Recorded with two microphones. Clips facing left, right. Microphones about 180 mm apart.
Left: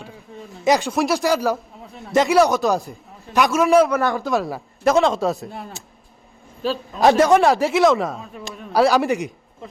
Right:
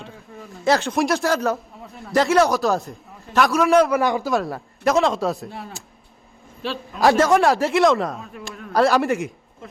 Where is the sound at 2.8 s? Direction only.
15° left (ahead or behind).